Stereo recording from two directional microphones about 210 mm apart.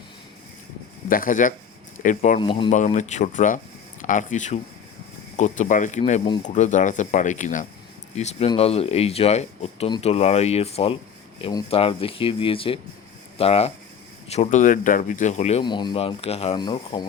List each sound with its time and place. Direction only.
1.0 s speech: 40° left (ahead or behind)
2.4 s speech: 25° left (ahead or behind)
2.7 s speech: 35° left (ahead or behind)